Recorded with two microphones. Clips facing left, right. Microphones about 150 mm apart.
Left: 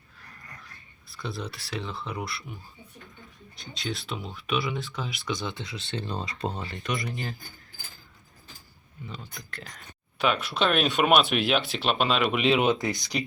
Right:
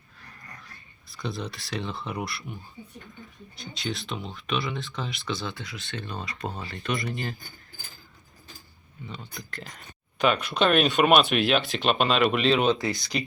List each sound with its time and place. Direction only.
1.0 s speech: centre (ahead or behind); by 7.1 s 20° left (ahead or behind)
9.0 s speech: centre (ahead or behind)